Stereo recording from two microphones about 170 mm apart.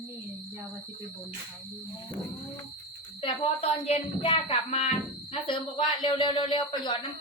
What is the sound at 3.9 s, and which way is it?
Child singing, 35° left (ahead or behind).